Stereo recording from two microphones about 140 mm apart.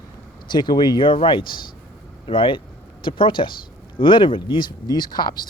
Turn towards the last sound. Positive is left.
turn(degrees=30)  # may be behind; listen again after turning